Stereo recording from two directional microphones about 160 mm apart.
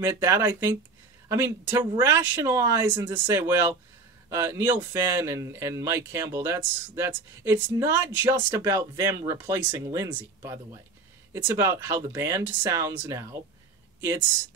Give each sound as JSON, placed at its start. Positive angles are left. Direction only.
{"t": 0.0, "sound": "speech", "side_deg": -20}